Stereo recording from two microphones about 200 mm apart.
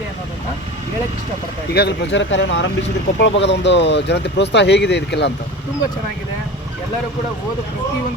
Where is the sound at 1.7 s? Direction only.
55° left (ahead or behind).